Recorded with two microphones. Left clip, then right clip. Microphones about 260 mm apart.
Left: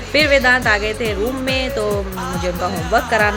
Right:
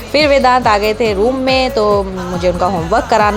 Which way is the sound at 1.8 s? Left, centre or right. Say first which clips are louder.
Right 7 dB; centre.